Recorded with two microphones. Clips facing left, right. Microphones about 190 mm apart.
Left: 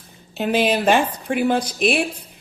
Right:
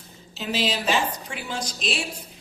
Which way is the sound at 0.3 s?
55° left (ahead or behind).